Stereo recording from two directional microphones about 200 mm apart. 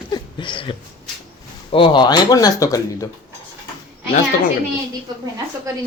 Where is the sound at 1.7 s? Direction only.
25° left (ahead or behind).